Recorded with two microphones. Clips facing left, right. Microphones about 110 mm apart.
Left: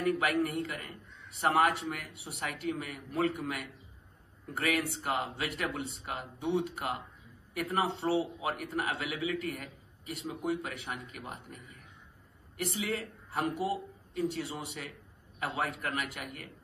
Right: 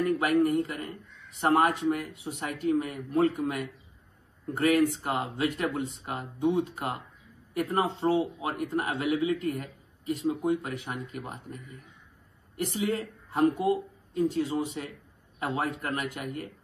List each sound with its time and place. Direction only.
0.0 s a man's voice: 30° right (ahead or behind)
12.6 s a man's voice: 30° right (ahead or behind)